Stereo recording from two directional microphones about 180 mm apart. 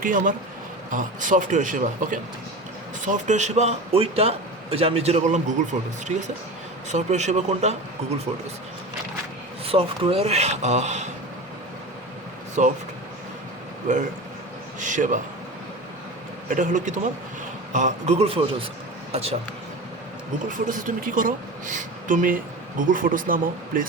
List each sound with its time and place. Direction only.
0.0 s a woman's voice: 50° right (ahead or behind)
6.9 s a man's voice: 40° right (ahead or behind)
9.6 s a man's voice: 30° right (ahead or behind)
12.6 s a woman's voice: 45° right (ahead or behind)
13.8 s a woman's voice: 40° right (ahead or behind)
16.5 s a woman's voice: 45° right (ahead or behind)
20.5 s a woman's voice: 45° right (ahead or behind)